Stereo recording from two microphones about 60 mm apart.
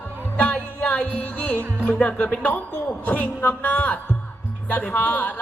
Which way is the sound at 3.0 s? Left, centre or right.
Left.